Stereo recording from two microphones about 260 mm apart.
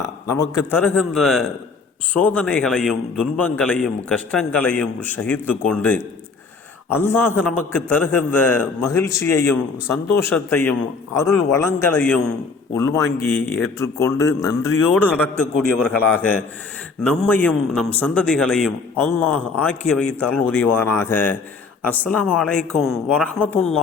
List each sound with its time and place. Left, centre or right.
0.3 s a man's voice: centre